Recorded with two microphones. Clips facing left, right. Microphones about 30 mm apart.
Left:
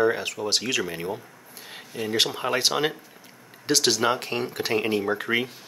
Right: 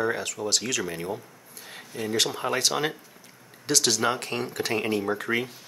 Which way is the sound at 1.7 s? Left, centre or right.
Centre.